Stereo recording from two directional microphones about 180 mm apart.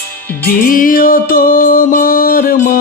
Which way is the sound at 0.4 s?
50° left (ahead or behind).